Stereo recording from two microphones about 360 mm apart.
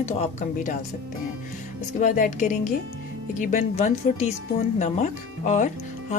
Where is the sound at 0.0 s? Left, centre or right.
Centre.